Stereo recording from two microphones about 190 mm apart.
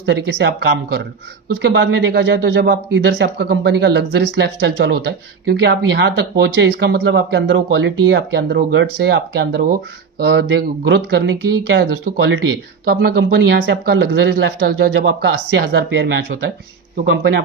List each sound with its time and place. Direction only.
0.0 s speech: 65° right (ahead or behind)
1.5 s speech: 70° right (ahead or behind)
12.8 s speech: 60° right (ahead or behind); by 16.4 s 75° right (ahead or behind)